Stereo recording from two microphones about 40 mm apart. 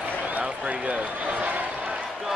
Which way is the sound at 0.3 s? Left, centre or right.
Right.